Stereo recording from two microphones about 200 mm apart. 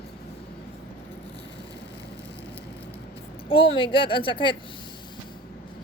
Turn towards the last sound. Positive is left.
turn(degrees=25)  # may be behind; listen again after turning